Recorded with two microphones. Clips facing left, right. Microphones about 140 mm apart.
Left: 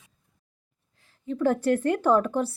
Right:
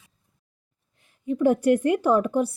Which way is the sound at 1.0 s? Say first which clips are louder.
Right 4 dB; 15° right (ahead or behind).